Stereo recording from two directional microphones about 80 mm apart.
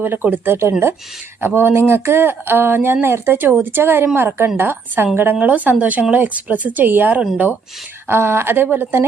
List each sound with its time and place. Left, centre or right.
0.0 s speech: right